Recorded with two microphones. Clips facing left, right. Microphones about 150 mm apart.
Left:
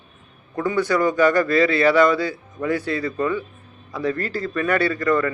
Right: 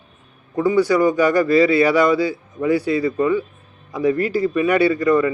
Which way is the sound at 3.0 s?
20° right (ahead or behind).